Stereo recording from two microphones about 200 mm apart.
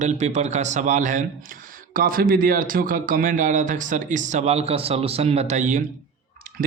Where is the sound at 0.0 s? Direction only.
35° right (ahead or behind).